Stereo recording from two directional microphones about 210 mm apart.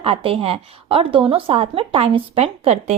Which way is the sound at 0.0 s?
25° right (ahead or behind).